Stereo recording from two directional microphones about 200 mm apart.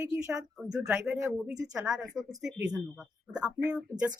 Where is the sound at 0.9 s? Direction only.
10° right (ahead or behind).